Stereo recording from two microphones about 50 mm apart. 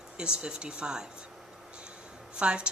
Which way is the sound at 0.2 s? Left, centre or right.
Centre.